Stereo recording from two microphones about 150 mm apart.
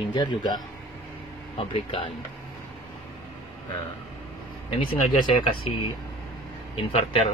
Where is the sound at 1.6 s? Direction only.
35° left (ahead or behind).